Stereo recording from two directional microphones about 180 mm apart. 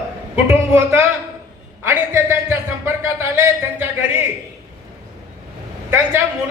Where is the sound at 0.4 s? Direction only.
15° right (ahead or behind).